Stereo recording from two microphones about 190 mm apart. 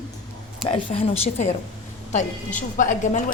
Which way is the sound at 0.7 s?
30° left (ahead or behind).